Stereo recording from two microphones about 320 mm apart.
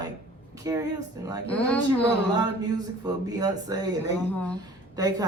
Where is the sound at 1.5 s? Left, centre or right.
Centre.